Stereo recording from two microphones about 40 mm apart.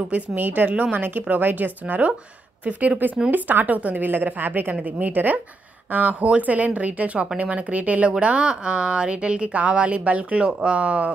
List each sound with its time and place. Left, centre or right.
0.4 s a woman's voice: right
0.9 s a woman's voice: right
8.2 s a woman's voice: right